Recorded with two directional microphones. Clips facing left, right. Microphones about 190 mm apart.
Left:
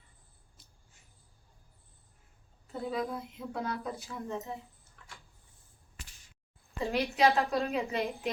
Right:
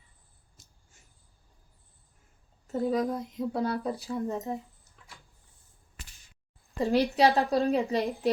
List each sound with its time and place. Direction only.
0.6 s a sound: 45° right (ahead or behind)
2.7 s speech: 40° right (ahead or behind)
6.7 s speech: 35° right (ahead or behind)